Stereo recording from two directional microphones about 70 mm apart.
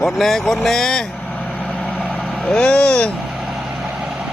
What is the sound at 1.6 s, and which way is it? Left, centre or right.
Vehicle, left.